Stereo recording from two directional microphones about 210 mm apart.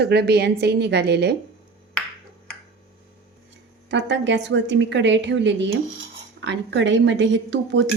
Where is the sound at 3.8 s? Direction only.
55° right (ahead or behind).